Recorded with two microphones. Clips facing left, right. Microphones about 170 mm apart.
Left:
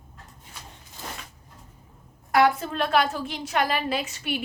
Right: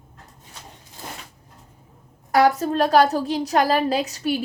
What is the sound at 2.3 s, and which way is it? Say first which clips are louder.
A woman's voice: right 4 dB; 40° right (ahead or behind).